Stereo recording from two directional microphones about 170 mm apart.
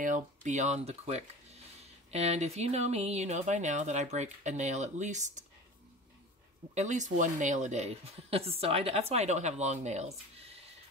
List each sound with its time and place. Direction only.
0.0 s speech: 50° right (ahead or behind)
6.7 s speech: 45° right (ahead or behind)